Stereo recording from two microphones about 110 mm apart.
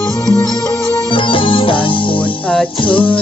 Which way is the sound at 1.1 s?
50° left (ahead or behind).